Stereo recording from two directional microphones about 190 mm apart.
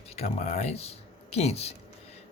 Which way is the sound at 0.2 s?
35° left (ahead or behind).